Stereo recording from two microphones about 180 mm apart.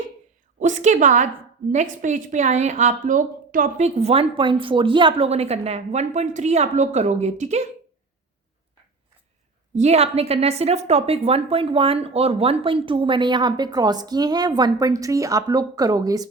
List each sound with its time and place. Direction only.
0.6 s a woman's voice: 40° right (ahead or behind)
9.7 s a woman's voice: 35° right (ahead or behind); by 16.2 s 20° right (ahead or behind)